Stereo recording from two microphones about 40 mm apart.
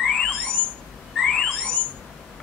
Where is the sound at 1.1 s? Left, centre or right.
Centre.